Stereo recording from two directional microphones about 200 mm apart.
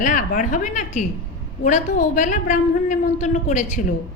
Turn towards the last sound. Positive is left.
turn(degrees=40)  # may be behind; listen again after turning